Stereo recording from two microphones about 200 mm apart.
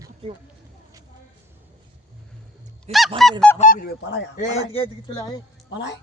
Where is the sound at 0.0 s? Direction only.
25° right (ahead or behind).